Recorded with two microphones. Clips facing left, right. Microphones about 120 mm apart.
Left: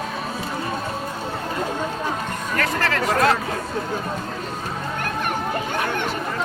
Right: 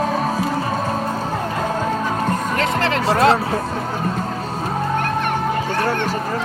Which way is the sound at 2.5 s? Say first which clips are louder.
Left 1 dB; 20° right (ahead or behind).